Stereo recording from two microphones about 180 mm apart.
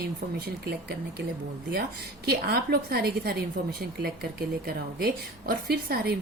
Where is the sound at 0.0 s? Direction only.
60° right (ahead or behind).